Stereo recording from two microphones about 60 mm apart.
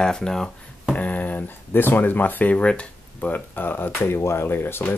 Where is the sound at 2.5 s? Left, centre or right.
Centre.